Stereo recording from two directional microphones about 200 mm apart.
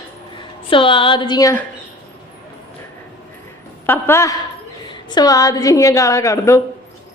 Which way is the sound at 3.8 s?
10° left (ahead or behind).